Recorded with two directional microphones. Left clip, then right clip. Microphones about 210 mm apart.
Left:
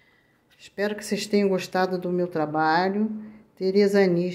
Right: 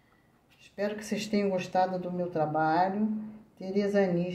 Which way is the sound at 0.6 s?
35° left (ahead or behind).